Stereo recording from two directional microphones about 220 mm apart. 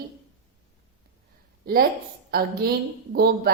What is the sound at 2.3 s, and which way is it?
A woman's voice, 45° right (ahead or behind).